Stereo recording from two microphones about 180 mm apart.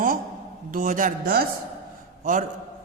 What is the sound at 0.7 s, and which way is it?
Speech, 50° right (ahead or behind).